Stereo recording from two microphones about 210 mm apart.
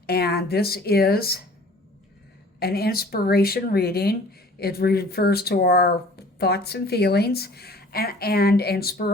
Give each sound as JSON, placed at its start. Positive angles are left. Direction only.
{"t": 0.0, "sound": "speech", "side_deg": 45}
{"t": 2.6, "sound": "speech", "side_deg": 50}